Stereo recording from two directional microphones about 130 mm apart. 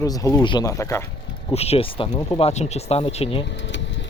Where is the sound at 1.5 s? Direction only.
50° left (ahead or behind).